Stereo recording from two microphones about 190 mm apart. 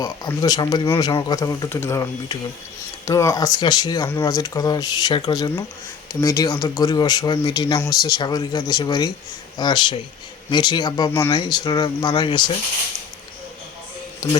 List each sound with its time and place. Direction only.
0.0 s speech: 20° left (ahead or behind)